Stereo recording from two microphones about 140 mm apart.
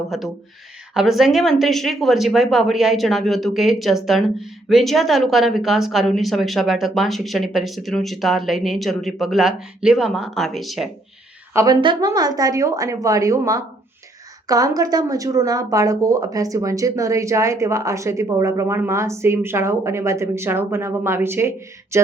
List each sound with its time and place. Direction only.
0.1 s speech: centre (ahead or behind)
11.5 s speech: 25° right (ahead or behind)
21.9 s a sound: 20° right (ahead or behind)